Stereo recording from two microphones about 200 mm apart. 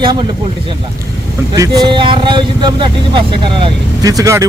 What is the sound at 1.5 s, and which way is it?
Speech, 20° right (ahead or behind).